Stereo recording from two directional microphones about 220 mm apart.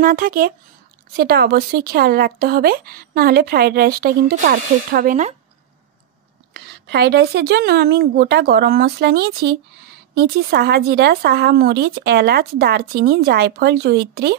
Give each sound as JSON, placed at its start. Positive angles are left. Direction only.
{"t": 0.0, "sound": "speech", "side_deg": -40}
{"t": 6.5, "sound": "speech", "side_deg": -45}